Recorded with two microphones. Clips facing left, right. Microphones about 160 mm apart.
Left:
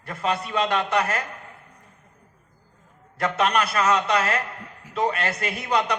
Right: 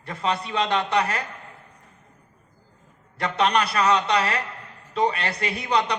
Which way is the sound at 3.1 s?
30° right (ahead or behind).